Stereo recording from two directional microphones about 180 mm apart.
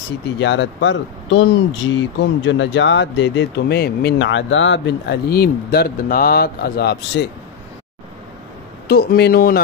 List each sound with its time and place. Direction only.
0.4 s speech: 80° left; by 7.2 s 65° left (ahead or behind)
8.8 s speech: 60° left (ahead or behind)